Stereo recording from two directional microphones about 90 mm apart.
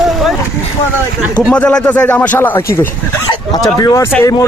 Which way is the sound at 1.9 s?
15° left (ahead or behind).